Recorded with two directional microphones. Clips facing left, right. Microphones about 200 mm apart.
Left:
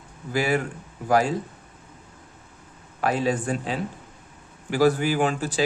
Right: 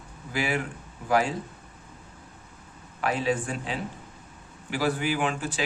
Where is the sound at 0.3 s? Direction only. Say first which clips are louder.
Left 5 dB; 40° left (ahead or behind).